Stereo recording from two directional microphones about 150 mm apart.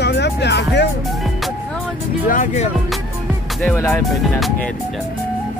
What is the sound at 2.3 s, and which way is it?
Speech, 60° left (ahead or behind).